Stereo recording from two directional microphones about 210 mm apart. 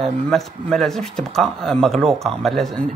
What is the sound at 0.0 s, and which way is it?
Speech, centre (ahead or behind).